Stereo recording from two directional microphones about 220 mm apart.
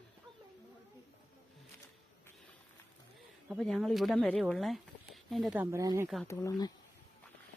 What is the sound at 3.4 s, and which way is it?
Speech, centre (ahead or behind).